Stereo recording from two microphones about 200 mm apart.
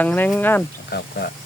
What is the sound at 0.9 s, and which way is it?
Speech, 55° left (ahead or behind).